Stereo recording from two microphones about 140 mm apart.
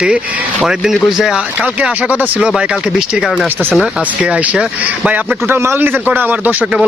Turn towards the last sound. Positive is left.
turn(degrees=-10)  # may be behind; listen again after turning